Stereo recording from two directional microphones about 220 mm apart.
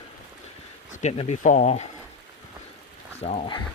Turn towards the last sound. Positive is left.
turn(degrees=25)  # may be behind; listen again after turning